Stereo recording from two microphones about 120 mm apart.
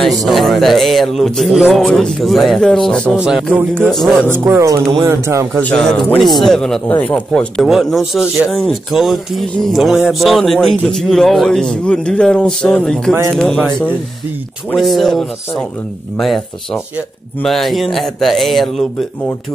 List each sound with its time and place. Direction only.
0.0 s speech: centre (ahead or behind)
4.6 s speech: 25° right (ahead or behind)
5.6 s speech: 10° left (ahead or behind)
7.6 s speech: 5° right (ahead or behind)
14.8 s speech: centre (ahead or behind)